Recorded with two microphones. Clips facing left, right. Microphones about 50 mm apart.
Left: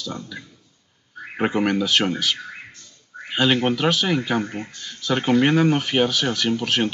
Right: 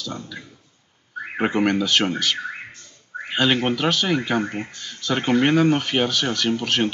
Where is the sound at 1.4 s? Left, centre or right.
Centre.